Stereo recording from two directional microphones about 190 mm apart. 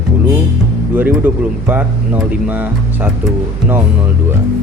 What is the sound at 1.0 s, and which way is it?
Speech, 10° right (ahead or behind).